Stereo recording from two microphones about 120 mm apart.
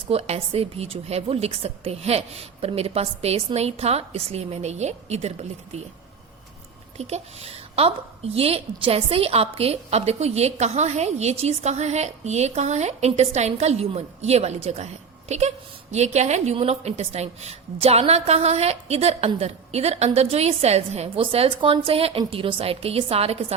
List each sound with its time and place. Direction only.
0.1 s a woman's voice: 55° right (ahead or behind)
6.9 s a woman's voice: 60° right (ahead or behind)
21.2 s a woman's voice: 50° right (ahead or behind)